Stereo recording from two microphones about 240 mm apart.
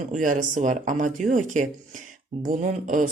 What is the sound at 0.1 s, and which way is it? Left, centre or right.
Speech, right.